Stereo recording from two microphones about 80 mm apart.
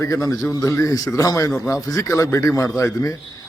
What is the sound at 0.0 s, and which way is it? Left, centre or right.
A man's voice, left.